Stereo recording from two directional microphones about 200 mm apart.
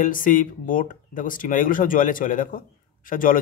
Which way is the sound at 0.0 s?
40° left (ahead or behind).